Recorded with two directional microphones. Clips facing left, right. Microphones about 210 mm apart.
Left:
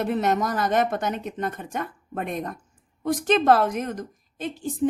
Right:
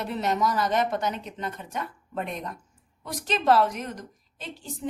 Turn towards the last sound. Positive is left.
turn(degrees=50)  # may be behind; listen again after turning